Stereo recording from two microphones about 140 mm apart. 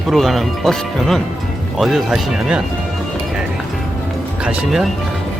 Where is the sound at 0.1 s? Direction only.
Centre (ahead or behind).